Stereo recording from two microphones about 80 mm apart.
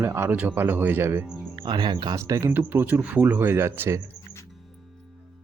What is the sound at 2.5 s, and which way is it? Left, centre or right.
Speech, right.